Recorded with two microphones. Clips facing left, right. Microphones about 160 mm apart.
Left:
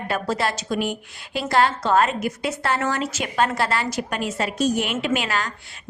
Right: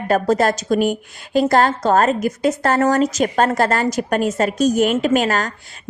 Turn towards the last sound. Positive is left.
turn(degrees=-45)  # may be behind; listen again after turning